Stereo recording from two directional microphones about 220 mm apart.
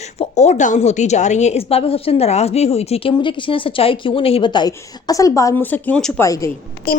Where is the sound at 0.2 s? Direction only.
30° left (ahead or behind); by 6.5 s 15° left (ahead or behind).